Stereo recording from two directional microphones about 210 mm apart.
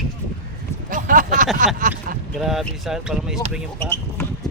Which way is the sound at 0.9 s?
40° right (ahead or behind).